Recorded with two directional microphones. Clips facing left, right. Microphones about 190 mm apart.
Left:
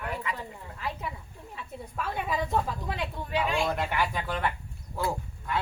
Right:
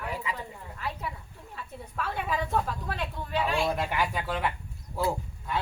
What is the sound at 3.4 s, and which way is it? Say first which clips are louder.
Speech: right 1 dB; 5° right (ahead or behind).